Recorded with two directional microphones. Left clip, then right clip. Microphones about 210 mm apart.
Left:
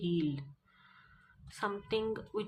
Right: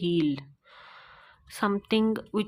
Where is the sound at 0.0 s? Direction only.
50° right (ahead or behind).